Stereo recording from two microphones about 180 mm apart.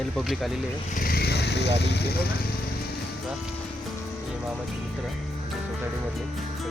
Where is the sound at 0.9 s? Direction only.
55° left (ahead or behind).